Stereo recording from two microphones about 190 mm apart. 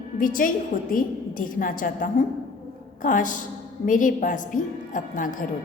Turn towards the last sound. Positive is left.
turn(degrees=45)  # may be behind; listen again after turning